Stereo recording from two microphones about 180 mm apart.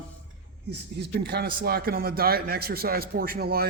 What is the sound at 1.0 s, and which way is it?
Speech, 60° right (ahead or behind).